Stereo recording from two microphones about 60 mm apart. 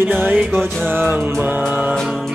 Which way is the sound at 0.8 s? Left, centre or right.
Right.